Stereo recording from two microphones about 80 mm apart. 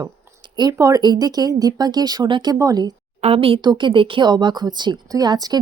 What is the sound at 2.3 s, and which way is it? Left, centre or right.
Speech, right.